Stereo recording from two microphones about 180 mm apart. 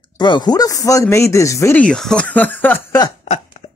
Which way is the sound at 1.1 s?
15° left (ahead or behind).